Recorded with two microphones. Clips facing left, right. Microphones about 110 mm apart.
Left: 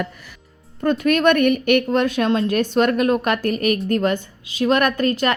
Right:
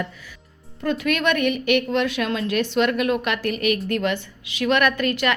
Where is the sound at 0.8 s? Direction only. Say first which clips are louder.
Left 5 dB; 45° left (ahead or behind).